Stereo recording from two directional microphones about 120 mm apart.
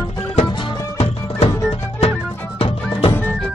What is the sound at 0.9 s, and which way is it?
Music, 60° left (ahead or behind).